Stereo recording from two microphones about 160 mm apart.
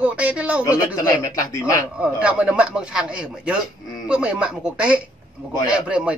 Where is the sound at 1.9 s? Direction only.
5° right (ahead or behind).